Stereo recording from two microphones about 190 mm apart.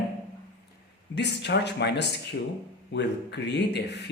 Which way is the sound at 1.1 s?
65° left (ahead or behind).